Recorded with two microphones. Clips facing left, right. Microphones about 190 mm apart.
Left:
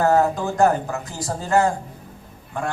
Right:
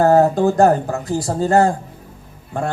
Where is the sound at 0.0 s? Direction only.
35° right (ahead or behind).